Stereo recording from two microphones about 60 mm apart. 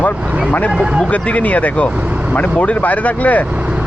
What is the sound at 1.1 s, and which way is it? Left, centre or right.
Speech, left.